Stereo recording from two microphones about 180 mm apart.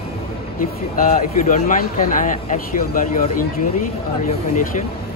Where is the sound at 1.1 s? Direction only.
45° left (ahead or behind).